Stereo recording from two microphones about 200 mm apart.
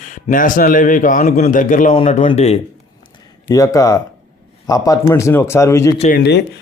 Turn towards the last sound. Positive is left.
turn(degrees=50)  # may be behind; listen again after turning